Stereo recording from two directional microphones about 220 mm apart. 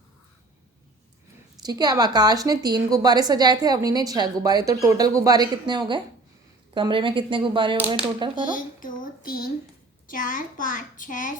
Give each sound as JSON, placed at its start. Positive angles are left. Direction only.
{"t": 1.6, "sound": "a woman's voice", "side_deg": -20}
{"t": 8.5, "sound": "a sound", "side_deg": 40}
{"t": 10.1, "sound": "a child's voice", "side_deg": 35}